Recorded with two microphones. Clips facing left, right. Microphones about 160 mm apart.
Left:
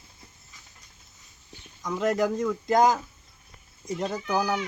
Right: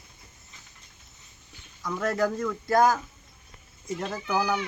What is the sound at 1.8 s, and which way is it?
Speech, 20° left (ahead or behind).